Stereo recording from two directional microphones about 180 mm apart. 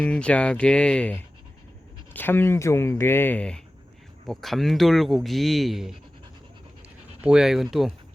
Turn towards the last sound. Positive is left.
turn(degrees=0)  # may be behind; listen again after turning